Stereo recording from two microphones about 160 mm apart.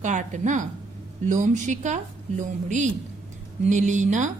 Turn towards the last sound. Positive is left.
turn(degrees=-50)  # may be behind; listen again after turning